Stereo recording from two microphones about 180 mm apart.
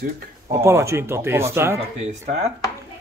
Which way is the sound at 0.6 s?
15° right (ahead or behind).